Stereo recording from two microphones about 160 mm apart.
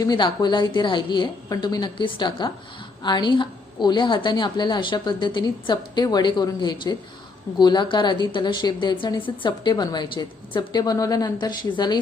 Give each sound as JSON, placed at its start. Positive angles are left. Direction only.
{"t": 0.0, "sound": "a woman's voice", "side_deg": 25}